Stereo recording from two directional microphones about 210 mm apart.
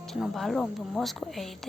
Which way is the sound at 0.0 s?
Centre (ahead or behind).